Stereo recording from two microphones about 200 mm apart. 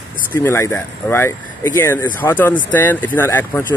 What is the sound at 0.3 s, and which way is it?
Speech, 10° left (ahead or behind).